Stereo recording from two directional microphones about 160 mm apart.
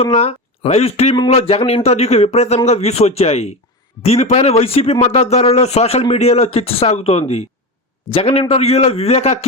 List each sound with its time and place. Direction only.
0.0 s speech: 40° left (ahead or behind)